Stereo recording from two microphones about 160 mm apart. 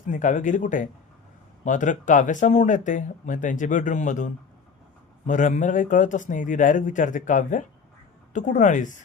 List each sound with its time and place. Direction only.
0.1 s speech: 50° left (ahead or behind)